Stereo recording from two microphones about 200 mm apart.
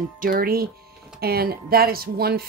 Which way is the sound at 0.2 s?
45° right (ahead or behind).